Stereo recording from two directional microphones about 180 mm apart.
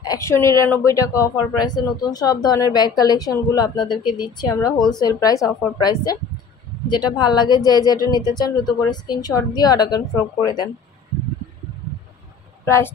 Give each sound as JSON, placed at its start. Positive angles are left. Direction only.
{"t": 0.0, "sound": "speech", "side_deg": 20}
{"t": 12.6, "sound": "a woman's voice", "side_deg": 15}